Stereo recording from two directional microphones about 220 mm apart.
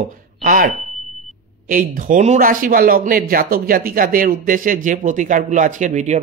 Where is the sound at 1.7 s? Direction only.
40° right (ahead or behind).